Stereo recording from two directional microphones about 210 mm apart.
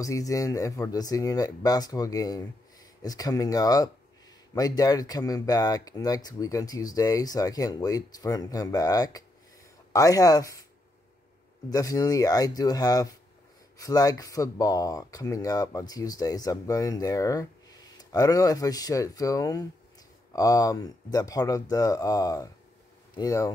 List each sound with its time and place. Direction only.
0.0 s speech: 15° left (ahead or behind)
11.7 s speech: 15° left (ahead or behind)